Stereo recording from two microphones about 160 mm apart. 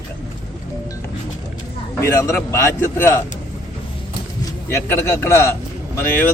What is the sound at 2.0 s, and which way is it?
Speech, 15° left (ahead or behind).